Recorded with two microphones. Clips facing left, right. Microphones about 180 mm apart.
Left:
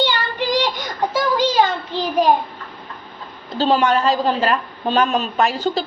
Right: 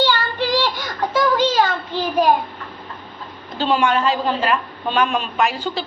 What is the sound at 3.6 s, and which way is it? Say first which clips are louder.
A woman's voice: left 2 dB; 40° left (ahead or behind).